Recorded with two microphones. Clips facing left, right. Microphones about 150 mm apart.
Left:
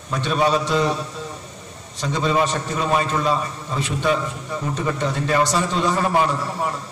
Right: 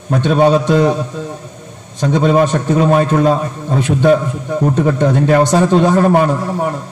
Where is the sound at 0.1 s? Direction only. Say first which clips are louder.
Right 8 dB; 55° right (ahead or behind).